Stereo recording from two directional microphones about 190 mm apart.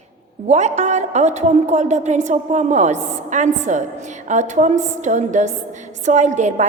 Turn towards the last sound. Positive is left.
turn(degrees=-40)  # may be behind; listen again after turning